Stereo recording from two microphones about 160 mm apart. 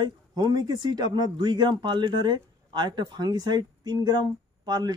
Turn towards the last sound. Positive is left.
turn(degrees=-25)  # may be behind; listen again after turning